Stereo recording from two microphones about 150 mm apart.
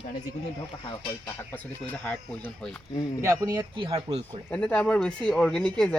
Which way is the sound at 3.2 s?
20° right (ahead or behind).